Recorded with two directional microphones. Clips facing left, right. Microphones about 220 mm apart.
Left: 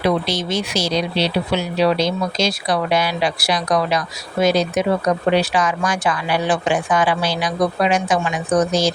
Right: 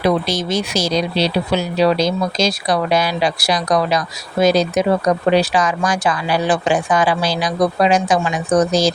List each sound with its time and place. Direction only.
0.0 s speech: 45° right (ahead or behind)